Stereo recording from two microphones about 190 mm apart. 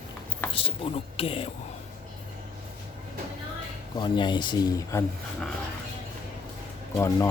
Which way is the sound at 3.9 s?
25° left (ahead or behind).